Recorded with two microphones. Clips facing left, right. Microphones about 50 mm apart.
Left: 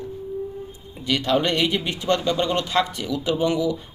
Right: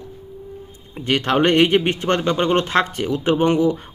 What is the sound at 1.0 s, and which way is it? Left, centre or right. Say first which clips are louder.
A man's voice: right 4 dB; right.